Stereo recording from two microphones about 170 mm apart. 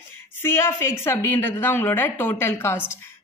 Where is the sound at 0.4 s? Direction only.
15° left (ahead or behind).